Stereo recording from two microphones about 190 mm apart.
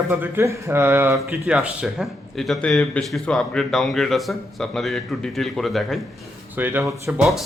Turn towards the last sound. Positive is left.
turn(degrees=-5)  # may be behind; listen again after turning